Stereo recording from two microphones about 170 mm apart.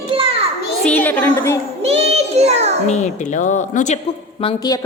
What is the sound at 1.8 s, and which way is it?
Speech, 35° right (ahead or behind).